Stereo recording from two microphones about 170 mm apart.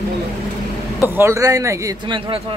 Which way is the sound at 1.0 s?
15° right (ahead or behind).